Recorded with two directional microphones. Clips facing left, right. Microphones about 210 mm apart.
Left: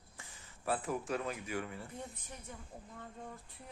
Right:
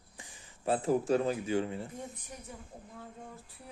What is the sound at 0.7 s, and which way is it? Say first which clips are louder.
Speech: right 10 dB; 30° right (ahead or behind).